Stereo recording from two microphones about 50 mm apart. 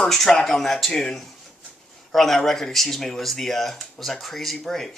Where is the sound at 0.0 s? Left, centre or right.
Centre.